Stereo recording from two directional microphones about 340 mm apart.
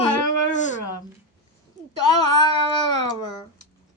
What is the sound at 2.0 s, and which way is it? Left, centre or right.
Speech, left.